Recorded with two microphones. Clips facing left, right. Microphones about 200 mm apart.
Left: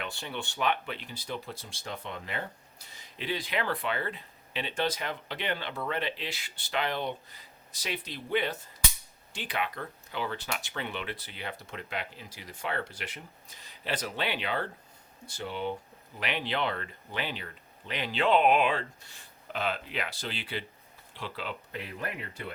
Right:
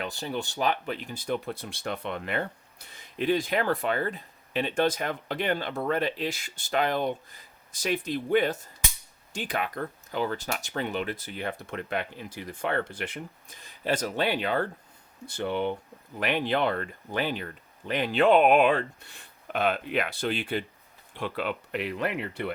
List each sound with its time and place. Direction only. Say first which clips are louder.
0.0 s speech: right 5 dB; 40° right (ahead or behind)
15.3 s speech: right 6 dB; 60° right (ahead or behind)
16.2 s speech: right 6 dB; 50° right (ahead or behind); by 22.5 s 65° right (ahead or behind)